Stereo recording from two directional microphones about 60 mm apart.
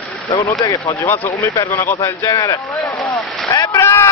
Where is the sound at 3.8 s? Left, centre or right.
Left.